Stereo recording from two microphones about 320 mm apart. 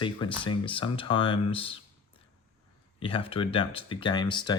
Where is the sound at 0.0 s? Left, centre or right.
Centre.